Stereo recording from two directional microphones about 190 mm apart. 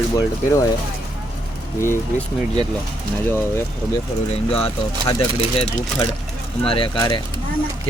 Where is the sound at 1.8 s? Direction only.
10° left (ahead or behind).